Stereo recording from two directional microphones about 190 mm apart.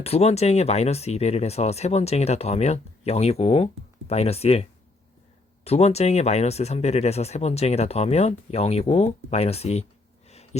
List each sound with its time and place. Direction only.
0.0 s speech: 35° left (ahead or behind)
5.6 s speech: 35° left (ahead or behind)
10.2 s a sound: 35° left (ahead or behind)